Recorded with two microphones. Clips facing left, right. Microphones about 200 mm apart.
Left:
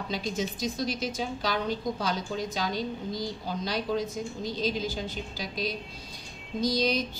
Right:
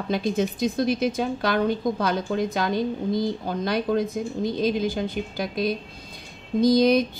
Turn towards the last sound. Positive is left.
turn(degrees=-55)  # may be behind; listen again after turning